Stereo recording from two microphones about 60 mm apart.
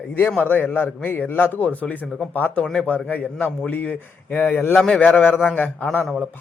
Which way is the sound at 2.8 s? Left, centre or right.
Left.